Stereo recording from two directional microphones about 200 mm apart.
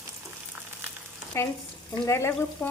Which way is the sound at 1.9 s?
15° left (ahead or behind).